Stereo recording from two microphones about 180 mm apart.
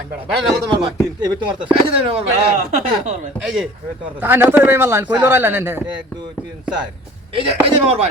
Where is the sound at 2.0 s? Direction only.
30° right (ahead or behind).